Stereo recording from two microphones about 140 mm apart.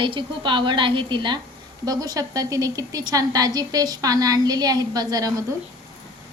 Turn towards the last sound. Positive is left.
turn(degrees=-25)  # may be behind; listen again after turning